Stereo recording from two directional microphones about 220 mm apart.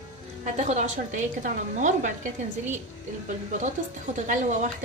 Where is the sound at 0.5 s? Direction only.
30° right (ahead or behind).